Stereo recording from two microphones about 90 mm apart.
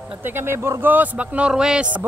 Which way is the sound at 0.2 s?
25° right (ahead or behind).